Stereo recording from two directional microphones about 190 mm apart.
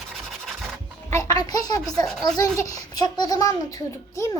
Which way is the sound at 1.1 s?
20° left (ahead or behind).